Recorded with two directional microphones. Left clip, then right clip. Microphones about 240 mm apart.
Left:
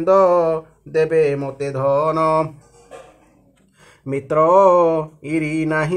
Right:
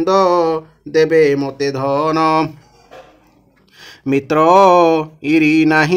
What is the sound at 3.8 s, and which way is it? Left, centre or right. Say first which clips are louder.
Speech: right 8 dB; right.